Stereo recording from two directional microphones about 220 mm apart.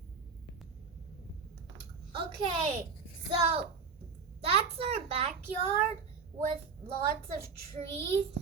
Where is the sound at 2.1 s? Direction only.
25° right (ahead or behind).